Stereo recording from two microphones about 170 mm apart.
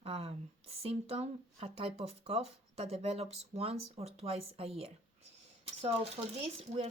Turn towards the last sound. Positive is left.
turn(degrees=-35)  # may be behind; listen again after turning